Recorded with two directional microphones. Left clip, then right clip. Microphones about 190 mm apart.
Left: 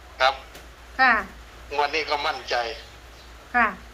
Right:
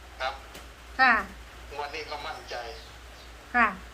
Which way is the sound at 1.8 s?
65° left (ahead or behind).